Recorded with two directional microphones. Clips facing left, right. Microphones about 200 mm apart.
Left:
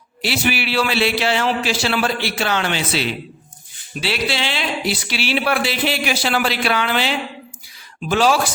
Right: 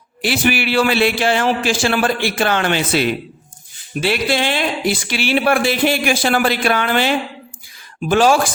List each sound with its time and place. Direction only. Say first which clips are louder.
0.2 s speech: right 4 dB; 50° right (ahead or behind)